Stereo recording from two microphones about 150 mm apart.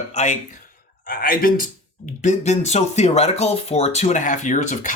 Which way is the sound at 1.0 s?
75° left (ahead or behind).